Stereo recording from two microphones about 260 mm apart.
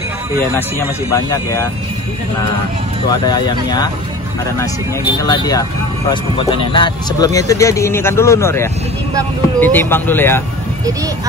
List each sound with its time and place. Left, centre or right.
0.6 s speech: centre
3.1 s speech: centre
5.2 s speech: centre